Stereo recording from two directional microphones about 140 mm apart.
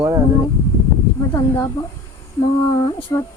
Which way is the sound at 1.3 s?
25° left (ahead or behind).